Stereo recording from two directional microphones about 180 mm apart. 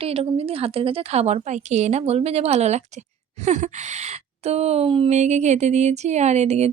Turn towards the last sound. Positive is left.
turn(degrees=-35)  # may be behind; listen again after turning